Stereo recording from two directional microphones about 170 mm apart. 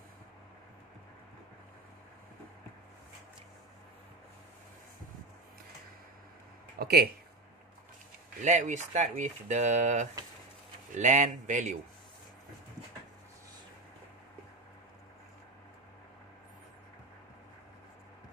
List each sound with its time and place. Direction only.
6.8 s speech: 65° right (ahead or behind)
8.4 s speech: 45° right (ahead or behind)